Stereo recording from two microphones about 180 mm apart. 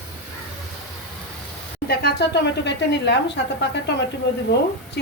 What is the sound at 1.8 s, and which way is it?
Speech, 65° left (ahead or behind).